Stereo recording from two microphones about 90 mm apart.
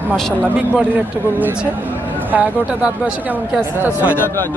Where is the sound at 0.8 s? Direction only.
15° right (ahead or behind).